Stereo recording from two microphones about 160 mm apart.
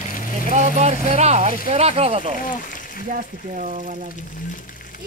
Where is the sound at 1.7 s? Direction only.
40° right (ahead or behind).